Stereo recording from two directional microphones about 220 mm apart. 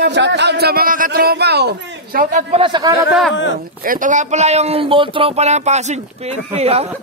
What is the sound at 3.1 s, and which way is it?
Speech, centre (ahead or behind).